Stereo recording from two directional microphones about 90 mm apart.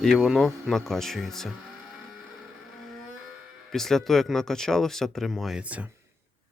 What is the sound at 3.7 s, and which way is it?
Speech, 5° left (ahead or behind).